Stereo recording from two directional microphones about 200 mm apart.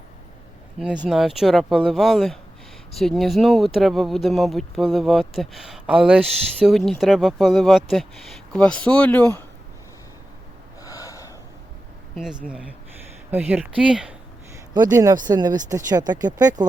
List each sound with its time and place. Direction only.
1.0 s speech: centre (ahead or behind)
10.8 s gasp: 15° left (ahead or behind)
12.1 s speech: 5° right (ahead or behind)
14.7 s speech: 20° right (ahead or behind)